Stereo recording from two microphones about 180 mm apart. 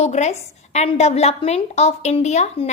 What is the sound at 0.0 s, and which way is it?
A woman's voice, 35° left (ahead or behind).